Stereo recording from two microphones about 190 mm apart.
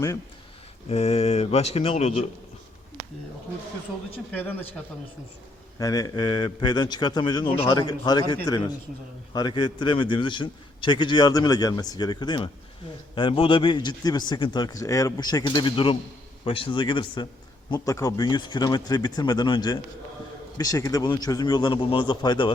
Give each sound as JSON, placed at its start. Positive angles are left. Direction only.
{"t": 0.9, "sound": "speech", "side_deg": 35}
{"t": 4.3, "sound": "speech", "side_deg": 10}
{"t": 5.8, "sound": "a man's voice", "side_deg": 20}